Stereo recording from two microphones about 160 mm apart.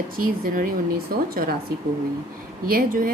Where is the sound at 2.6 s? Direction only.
65° right (ahead or behind).